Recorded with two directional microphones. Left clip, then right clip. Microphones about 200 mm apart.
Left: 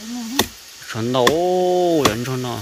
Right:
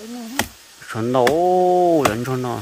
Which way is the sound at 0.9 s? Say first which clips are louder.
Even; 20° right (ahead or behind).